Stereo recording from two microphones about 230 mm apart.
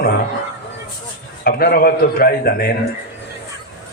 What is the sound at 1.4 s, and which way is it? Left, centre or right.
A man's voice, left.